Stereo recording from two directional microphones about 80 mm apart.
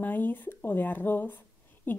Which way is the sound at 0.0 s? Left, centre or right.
Left.